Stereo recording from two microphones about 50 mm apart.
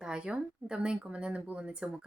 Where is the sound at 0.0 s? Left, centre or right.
Centre.